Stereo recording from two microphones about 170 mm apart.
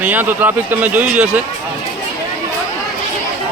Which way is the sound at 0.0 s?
10° right (ahead or behind).